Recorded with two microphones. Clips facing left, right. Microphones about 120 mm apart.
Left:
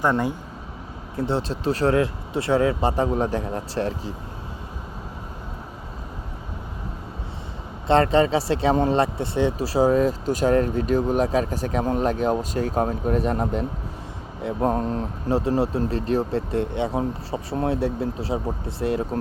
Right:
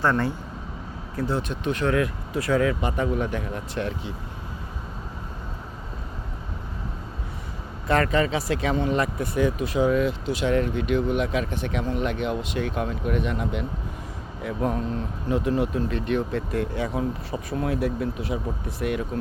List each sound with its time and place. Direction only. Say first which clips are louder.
0.0 s speech: left 1 dB; 15° left (ahead or behind)
1.1 s speech: left 2 dB; 25° left (ahead or behind)
7.9 s speech: left 4 dB; 30° left (ahead or behind)